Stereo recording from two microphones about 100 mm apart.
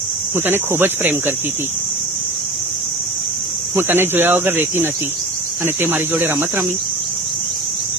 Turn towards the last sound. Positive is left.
turn(degrees=-25)  # may be behind; listen again after turning